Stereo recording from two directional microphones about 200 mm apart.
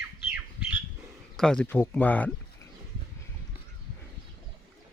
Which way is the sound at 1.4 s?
5° left (ahead or behind).